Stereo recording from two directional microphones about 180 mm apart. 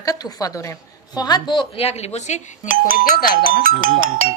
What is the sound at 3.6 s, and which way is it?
Speech, 50° right (ahead or behind).